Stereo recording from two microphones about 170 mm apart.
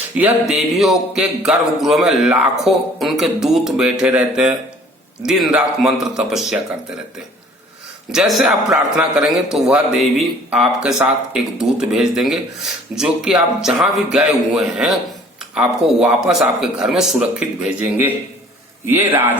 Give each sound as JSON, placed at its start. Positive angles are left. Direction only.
{"t": 0.2, "sound": "a man's voice", "side_deg": -5}
{"t": 8.1, "sound": "a man's voice", "side_deg": -5}